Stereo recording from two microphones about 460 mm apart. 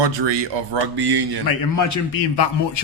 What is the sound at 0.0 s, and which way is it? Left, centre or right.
Speech, right.